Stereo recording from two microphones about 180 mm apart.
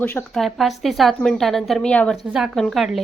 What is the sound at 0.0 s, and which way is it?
Speech, 10° left (ahead or behind).